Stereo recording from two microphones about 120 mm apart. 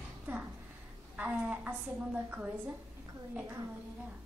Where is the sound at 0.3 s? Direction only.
15° right (ahead or behind).